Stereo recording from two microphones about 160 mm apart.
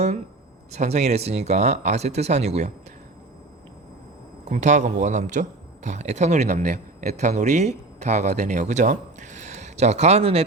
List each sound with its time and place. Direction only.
0.7 s a man's voice: 45° right (ahead or behind)
4.4 s a man's voice: 45° right (ahead or behind)